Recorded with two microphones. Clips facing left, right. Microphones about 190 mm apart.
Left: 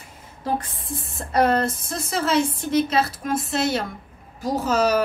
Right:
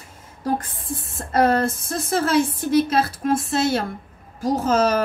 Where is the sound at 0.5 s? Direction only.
50° right (ahead or behind).